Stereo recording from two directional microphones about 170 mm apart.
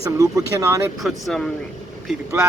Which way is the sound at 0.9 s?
Centre (ahead or behind).